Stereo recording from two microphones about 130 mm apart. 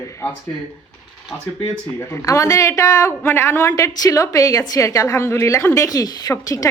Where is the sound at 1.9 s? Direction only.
20° left (ahead or behind).